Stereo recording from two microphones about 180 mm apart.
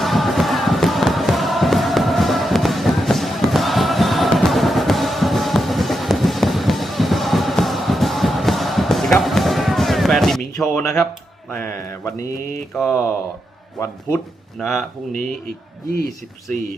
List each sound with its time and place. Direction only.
0.0 s music: centre (ahead or behind)
11.5 s speech: 15° left (ahead or behind)
14.6 s speech: centre (ahead or behind)